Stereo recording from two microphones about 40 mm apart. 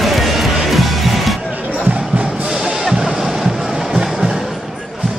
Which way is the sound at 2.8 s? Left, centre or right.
Centre.